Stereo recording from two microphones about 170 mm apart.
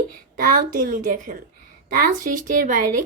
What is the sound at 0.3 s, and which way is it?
Speech, 55° right (ahead or behind).